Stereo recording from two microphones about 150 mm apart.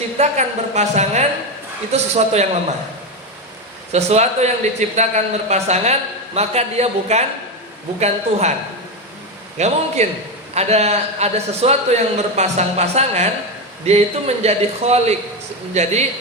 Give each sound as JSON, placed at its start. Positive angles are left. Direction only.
{"t": 0.2, "sound": "a man's voice", "side_deg": -50}
{"t": 3.9, "sound": "a man's voice", "side_deg": -45}
{"t": 9.6, "sound": "a man's voice", "side_deg": -50}